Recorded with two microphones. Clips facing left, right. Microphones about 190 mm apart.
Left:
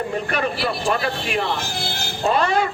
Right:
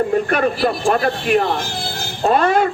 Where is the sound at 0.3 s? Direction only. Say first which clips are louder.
Right 6 dB; 50° right (ahead or behind).